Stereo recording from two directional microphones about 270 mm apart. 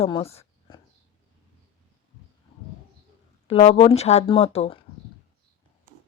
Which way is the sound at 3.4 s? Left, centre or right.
Left.